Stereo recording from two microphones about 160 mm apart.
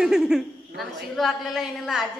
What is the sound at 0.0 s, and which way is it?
A man's voice, 5° right (ahead or behind).